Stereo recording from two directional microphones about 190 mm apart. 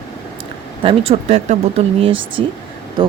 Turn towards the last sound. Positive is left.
turn(degrees=-25)  # may be behind; listen again after turning